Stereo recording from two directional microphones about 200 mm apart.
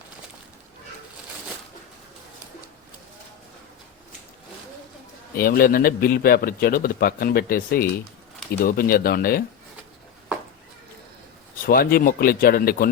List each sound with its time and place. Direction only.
5.4 s speech: 45° left (ahead or behind)
11.6 s speech: 50° left (ahead or behind)